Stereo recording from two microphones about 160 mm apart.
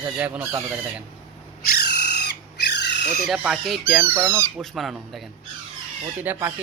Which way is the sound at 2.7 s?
90° left.